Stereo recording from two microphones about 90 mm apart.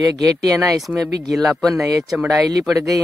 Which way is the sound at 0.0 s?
45° right (ahead or behind).